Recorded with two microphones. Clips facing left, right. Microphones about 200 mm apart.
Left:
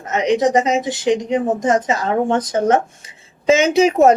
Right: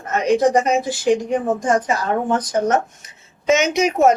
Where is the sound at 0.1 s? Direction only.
20° left (ahead or behind).